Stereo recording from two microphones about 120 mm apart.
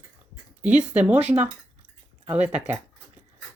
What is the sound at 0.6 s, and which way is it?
Speech, 10° right (ahead or behind).